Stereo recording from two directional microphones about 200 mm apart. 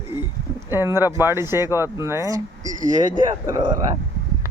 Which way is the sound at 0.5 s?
10° right (ahead or behind).